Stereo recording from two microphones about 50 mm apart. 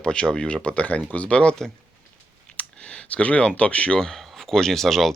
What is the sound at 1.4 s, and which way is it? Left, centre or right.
Speech, centre.